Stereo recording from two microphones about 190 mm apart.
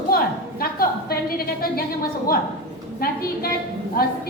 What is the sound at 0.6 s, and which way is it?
A woman's voice, 50° left (ahead or behind).